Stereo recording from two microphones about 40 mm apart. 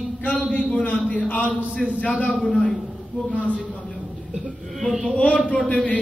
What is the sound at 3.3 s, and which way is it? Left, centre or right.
Speech, left.